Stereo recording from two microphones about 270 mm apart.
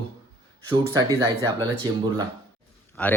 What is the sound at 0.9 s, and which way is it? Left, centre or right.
Speech, centre.